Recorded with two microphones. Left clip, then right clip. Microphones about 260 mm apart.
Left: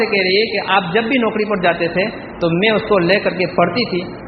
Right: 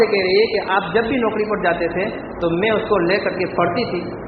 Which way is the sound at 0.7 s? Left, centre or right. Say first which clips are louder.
Left 3 dB; left.